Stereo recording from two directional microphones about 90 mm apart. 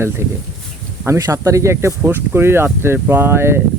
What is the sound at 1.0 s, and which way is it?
Speech, 35° right (ahead or behind).